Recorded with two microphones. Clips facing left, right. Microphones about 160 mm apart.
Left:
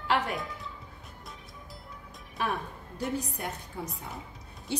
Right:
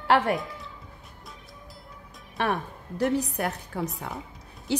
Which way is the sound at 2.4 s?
75° right (ahead or behind).